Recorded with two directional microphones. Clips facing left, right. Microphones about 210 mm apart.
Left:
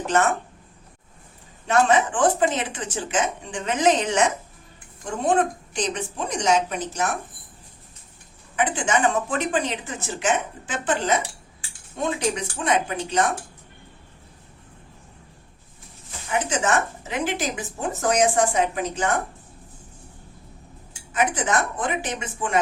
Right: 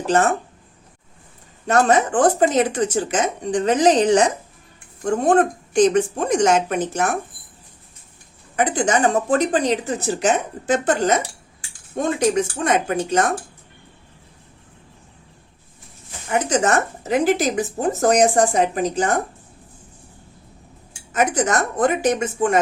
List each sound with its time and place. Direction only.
0.0 s speech: 35° right (ahead or behind)
1.6 s speech: 40° right (ahead or behind)
5.0 s a woman's voice: 45° right (ahead or behind)
8.5 s a woman's voice: 40° right (ahead or behind)
16.3 s speech: 40° right (ahead or behind)
21.1 s a woman's voice: 45° right (ahead or behind)